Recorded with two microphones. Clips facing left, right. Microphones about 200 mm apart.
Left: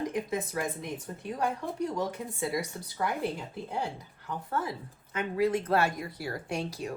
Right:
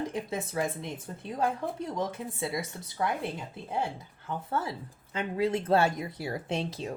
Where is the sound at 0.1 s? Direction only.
25° right (ahead or behind).